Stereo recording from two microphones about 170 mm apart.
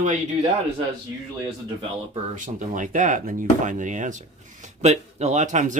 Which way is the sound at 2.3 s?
50° right (ahead or behind).